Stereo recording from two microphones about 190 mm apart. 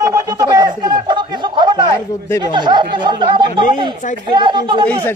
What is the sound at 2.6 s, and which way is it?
Speech, 25° right (ahead or behind).